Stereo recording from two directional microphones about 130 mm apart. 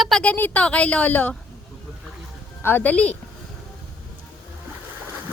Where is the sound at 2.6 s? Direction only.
15° left (ahead or behind).